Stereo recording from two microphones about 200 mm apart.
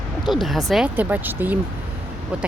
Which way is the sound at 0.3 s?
Centre (ahead or behind).